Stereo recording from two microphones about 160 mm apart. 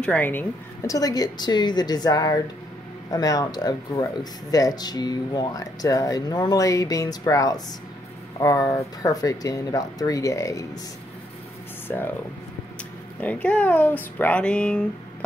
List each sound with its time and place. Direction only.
0.0 s speech: 10° left (ahead or behind)
11.9 s speech: 10° left (ahead or behind)
13.2 s speech: 10° left (ahead or behind)